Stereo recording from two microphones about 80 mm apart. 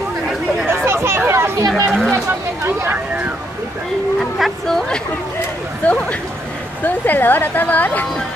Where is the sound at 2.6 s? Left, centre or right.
Right.